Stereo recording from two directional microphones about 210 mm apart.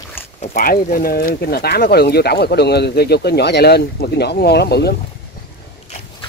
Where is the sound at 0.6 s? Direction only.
45° left (ahead or behind).